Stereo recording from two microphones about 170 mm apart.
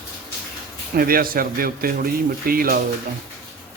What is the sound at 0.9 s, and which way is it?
Speech, 60° right (ahead or behind).